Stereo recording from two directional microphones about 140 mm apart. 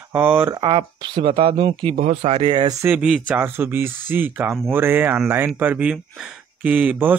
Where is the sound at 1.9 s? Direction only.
55° right (ahead or behind).